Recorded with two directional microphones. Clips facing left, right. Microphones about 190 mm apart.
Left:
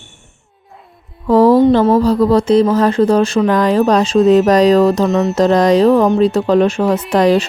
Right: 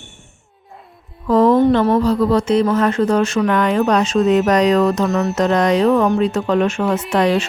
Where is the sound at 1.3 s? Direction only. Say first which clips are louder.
Left 3 dB; 35° left (ahead or behind).